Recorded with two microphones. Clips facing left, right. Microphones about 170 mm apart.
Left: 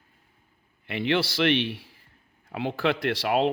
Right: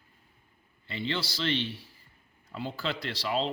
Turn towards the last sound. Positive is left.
turn(degrees=60)  # may be behind; listen again after turning